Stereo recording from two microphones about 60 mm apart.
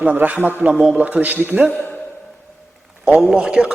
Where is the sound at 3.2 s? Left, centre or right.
Centre.